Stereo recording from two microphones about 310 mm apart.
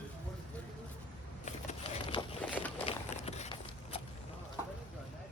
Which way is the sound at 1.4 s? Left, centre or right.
Centre.